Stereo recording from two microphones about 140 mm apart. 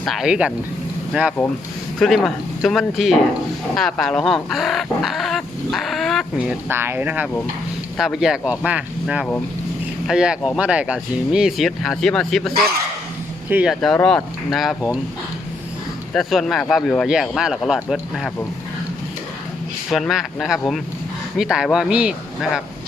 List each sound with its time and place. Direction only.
0.0 s speech: centre (ahead or behind)
2.0 s speech: centre (ahead or behind)
6.7 s speech: 15° right (ahead or behind); by 12.6 s centre (ahead or behind)
13.5 s speech: 10° right (ahead or behind)
13.8 s speech: 5° left (ahead or behind)
16.1 s speech: centre (ahead or behind)
19.9 s speech: centre (ahead or behind)